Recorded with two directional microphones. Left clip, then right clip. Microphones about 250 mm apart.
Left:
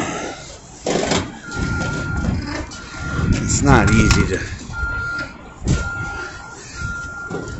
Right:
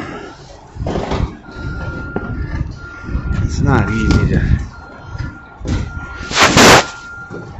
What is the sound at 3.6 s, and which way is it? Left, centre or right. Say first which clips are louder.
Speech: left 2 dB; centre.